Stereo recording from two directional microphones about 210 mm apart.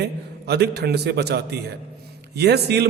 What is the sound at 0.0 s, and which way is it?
A man's voice, 50° right (ahead or behind).